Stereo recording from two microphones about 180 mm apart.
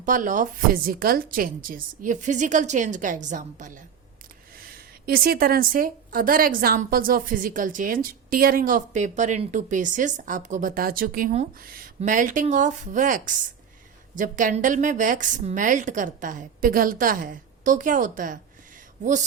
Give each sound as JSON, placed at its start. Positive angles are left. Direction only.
{"t": 0.0, "sound": "a woman's voice", "side_deg": -50}
{"t": 5.0, "sound": "a woman's voice", "side_deg": -55}